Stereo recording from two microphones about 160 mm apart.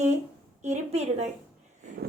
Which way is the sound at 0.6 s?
45° right (ahead or behind).